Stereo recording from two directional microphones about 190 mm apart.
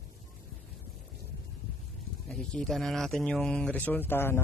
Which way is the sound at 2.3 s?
5° left (ahead or behind).